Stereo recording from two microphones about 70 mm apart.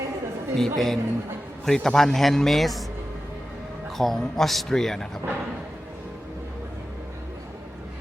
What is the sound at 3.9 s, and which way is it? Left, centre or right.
Speech, centre.